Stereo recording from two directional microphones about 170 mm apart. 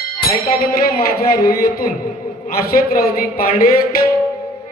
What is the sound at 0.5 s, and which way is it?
A man's voice, 65° left (ahead or behind).